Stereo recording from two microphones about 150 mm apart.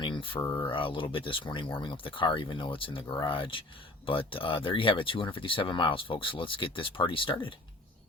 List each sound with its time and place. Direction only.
0.3 s speech: 20° left (ahead or behind)
0.7 s speech: 35° left (ahead or behind)